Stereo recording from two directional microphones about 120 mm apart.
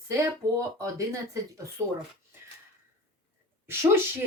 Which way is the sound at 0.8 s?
25° right (ahead or behind).